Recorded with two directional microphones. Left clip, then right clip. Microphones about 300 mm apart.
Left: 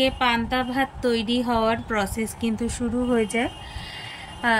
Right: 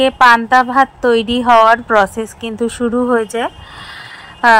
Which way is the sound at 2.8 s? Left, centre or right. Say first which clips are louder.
Right 9 dB; right.